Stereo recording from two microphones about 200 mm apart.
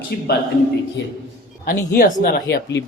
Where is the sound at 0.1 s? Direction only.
50° left (ahead or behind).